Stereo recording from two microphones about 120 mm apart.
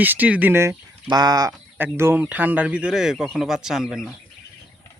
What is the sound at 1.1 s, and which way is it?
Speech, 35° right (ahead or behind).